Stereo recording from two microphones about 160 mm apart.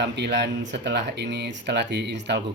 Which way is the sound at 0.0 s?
90° right.